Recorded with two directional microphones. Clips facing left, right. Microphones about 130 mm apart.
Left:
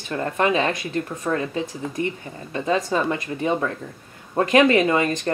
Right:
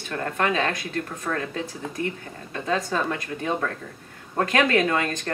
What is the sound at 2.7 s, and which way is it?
Speech, 15° left (ahead or behind).